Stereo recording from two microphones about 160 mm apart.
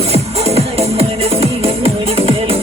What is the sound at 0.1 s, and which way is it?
Music, 40° right (ahead or behind).